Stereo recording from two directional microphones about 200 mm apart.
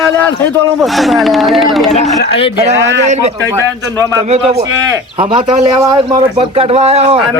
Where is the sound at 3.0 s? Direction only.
35° right (ahead or behind).